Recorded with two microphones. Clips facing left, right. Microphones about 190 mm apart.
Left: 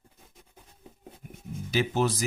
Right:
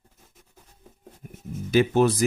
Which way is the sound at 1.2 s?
45° right (ahead or behind).